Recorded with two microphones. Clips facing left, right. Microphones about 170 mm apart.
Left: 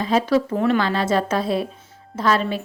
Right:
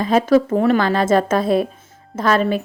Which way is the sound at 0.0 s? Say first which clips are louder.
Right 4 dB; 50° right (ahead or behind).